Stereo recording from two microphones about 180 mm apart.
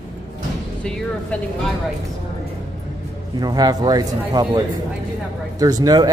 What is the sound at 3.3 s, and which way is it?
A man's voice, 20° right (ahead or behind).